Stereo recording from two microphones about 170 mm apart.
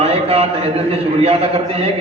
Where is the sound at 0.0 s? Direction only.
35° right (ahead or behind).